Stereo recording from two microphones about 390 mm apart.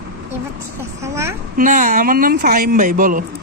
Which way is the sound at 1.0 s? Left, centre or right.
Centre.